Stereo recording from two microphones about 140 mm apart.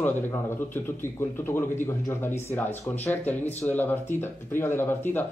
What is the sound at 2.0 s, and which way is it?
Speech, 15° left (ahead or behind).